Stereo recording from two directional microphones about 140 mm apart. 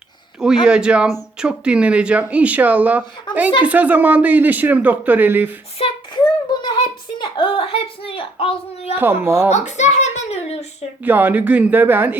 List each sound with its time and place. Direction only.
0.3 s speech: 5° right (ahead or behind)
5.8 s a woman's voice: 40° left (ahead or behind)
6.5 s a sound: 30° left (ahead or behind)
7.2 s a woman's voice: 40° left (ahead or behind)
9.0 s speech: 15° right (ahead or behind)
9.5 s a child's voice: 55° left (ahead or behind)
11.0 s speech: 15° right (ahead or behind)